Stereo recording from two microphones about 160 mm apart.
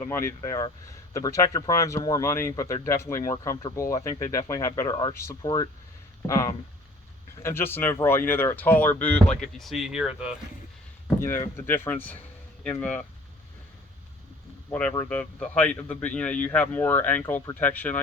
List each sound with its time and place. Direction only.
0.0 s speech: 15° left (ahead or behind); by 10.3 s 5° right (ahead or behind)
11.2 s speech: 15° left (ahead or behind)
14.7 s speech: 10° left (ahead or behind)